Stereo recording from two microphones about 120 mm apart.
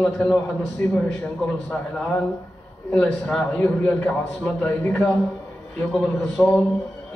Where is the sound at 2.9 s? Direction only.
10° left (ahead or behind).